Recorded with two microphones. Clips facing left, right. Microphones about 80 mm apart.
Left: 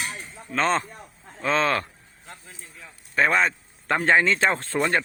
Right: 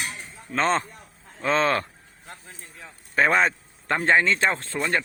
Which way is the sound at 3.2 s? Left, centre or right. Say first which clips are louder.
Right 1 dB; centre.